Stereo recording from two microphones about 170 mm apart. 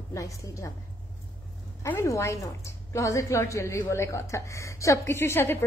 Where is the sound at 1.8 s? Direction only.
15° left (ahead or behind).